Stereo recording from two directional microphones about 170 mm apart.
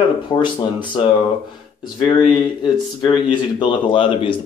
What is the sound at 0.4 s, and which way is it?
Speech, 25° left (ahead or behind).